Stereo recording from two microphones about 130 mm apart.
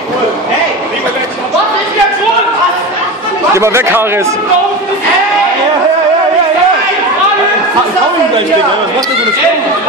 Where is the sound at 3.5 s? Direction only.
20° right (ahead or behind).